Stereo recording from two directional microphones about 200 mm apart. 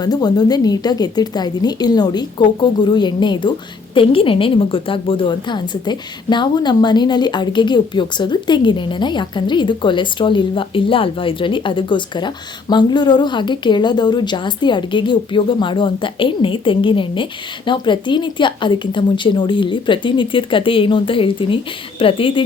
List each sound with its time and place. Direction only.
0.0 s a woman's voice: 20° left (ahead or behind)